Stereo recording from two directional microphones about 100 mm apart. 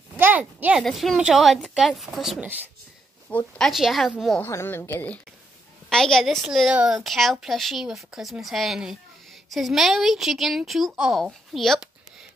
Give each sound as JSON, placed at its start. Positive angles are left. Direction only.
{"t": 0.2, "sound": "speech", "side_deg": -20}
{"t": 0.7, "sound": "speech", "side_deg": 0}
{"t": 3.3, "sound": "speech", "side_deg": 15}
{"t": 3.6, "sound": "speech", "side_deg": 0}
{"t": 4.4, "sound": "a woman's voice", "side_deg": 25}
{"t": 5.9, "sound": "a woman's voice", "side_deg": 5}